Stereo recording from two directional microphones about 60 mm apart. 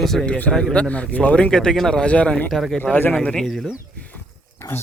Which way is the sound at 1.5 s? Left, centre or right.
Centre.